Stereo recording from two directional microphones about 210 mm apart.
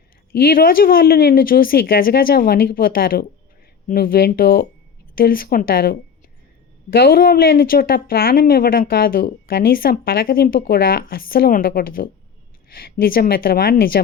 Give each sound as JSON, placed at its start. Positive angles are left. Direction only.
{"t": 0.3, "sound": "speech", "side_deg": 45}